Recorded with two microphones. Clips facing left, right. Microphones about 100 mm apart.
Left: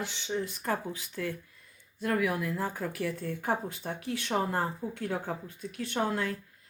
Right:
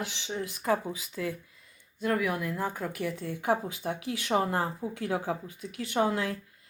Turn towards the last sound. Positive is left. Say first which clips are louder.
# right 3 dB
turn(degrees=-5)  # may be behind; listen again after turning